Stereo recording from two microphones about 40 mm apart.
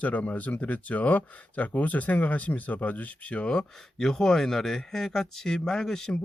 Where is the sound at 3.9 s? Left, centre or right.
Centre.